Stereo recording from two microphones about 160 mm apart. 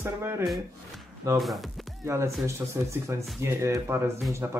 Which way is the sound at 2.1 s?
20° right (ahead or behind).